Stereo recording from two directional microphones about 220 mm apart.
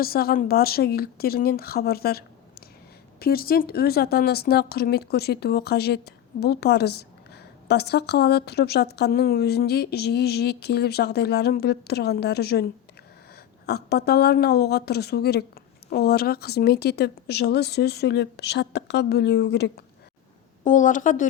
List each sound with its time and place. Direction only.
0.0 s speech: 45° left (ahead or behind)
20.7 s a woman's voice: 35° left (ahead or behind)